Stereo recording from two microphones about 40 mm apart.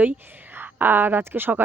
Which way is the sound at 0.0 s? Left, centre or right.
Right.